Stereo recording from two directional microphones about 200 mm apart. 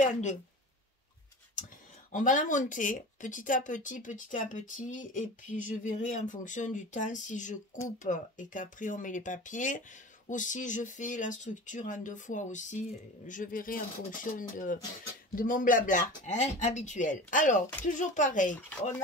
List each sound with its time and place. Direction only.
0.0 s speech: 35° left (ahead or behind)
2.1 s speech: 40° left (ahead or behind)